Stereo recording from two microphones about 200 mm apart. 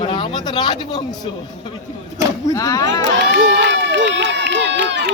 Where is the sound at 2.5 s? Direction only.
15° left (ahead or behind).